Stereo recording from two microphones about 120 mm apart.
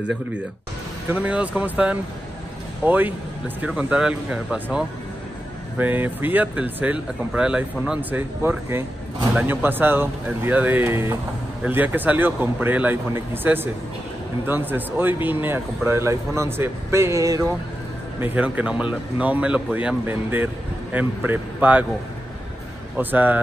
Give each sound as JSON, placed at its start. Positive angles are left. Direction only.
{"t": 1.0, "sound": "speech", "side_deg": -15}
{"t": 18.2, "sound": "speech", "side_deg": -10}
{"t": 22.9, "sound": "speech", "side_deg": -15}